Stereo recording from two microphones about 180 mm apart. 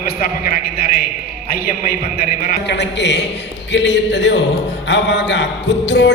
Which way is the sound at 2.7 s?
75° left (ahead or behind).